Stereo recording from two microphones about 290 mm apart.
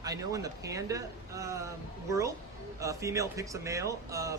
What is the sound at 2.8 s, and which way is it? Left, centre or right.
A man's voice, centre.